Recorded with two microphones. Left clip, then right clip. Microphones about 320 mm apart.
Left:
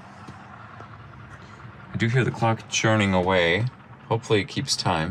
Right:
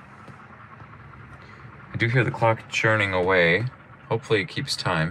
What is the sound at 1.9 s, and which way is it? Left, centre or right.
Speech, centre.